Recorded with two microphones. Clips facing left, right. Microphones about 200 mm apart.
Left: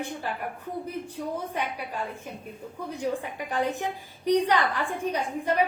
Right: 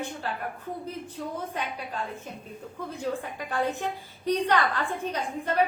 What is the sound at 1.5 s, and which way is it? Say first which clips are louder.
A woman's voice: left 2 dB; 10° left (ahead or behind).